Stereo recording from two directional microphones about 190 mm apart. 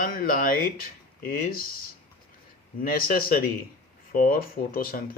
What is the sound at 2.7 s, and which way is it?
Speech, 50° left (ahead or behind).